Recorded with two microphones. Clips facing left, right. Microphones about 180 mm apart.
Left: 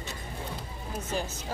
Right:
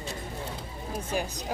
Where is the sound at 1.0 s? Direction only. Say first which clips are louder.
Right 2 dB; 15° right (ahead or behind).